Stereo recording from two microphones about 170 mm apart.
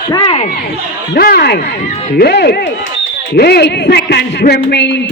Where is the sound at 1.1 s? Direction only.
65° left (ahead or behind).